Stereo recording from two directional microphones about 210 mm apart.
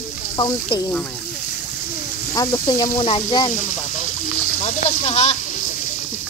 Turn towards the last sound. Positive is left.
turn(degrees=25)  # may be behind; listen again after turning